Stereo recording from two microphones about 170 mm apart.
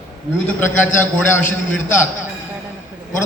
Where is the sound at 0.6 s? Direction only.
10° left (ahead or behind).